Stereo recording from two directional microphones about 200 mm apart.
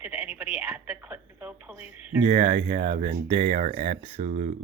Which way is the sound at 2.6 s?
40° right (ahead or behind).